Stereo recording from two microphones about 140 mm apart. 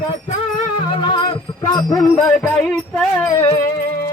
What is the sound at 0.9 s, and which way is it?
Music, 35° left (ahead or behind).